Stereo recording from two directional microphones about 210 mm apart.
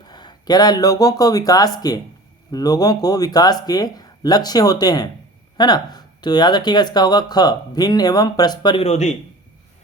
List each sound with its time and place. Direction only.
0.0 s speech: 20° left (ahead or behind)